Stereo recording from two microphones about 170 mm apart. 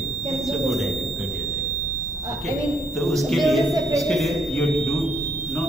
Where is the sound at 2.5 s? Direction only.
Centre (ahead or behind).